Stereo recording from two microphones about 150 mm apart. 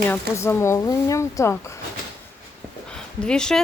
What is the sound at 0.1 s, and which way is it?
Speech, 20° left (ahead or behind).